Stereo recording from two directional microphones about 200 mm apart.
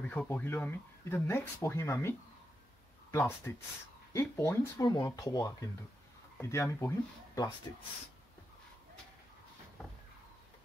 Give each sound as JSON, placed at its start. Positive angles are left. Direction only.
{"t": 0.0, "sound": "speech", "side_deg": 5}